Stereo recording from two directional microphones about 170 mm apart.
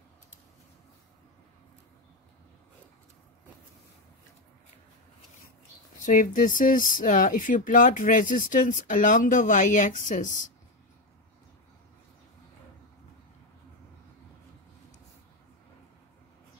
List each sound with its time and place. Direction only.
6.0 s speech: 50° left (ahead or behind)